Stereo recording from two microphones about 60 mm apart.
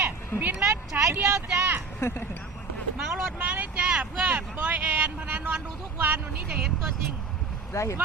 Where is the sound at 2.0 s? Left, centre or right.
Left.